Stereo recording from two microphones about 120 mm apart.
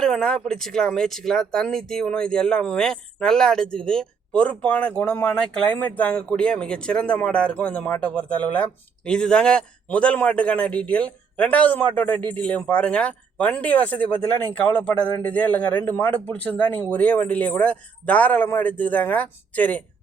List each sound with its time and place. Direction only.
0.0 s speech: 5° left (ahead or behind)